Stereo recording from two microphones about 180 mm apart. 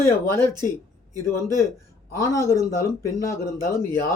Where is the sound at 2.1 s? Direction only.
15° left (ahead or behind).